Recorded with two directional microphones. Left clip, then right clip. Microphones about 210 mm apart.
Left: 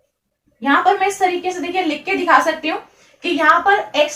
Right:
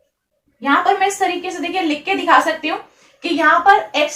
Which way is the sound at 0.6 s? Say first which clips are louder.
Even; 10° left (ahead or behind).